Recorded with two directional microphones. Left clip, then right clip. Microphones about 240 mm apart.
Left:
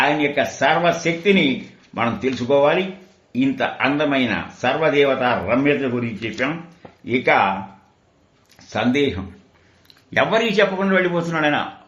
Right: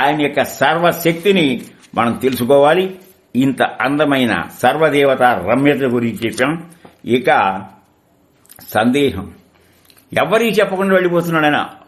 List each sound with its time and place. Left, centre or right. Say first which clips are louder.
0.0 s speech: right 3 dB; right
8.7 s a man's voice: right 5 dB; right